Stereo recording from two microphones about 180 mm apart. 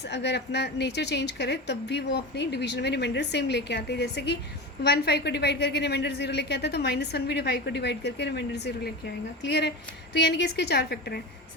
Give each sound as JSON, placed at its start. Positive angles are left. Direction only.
{"t": 0.1, "sound": "a woman's voice", "side_deg": 70}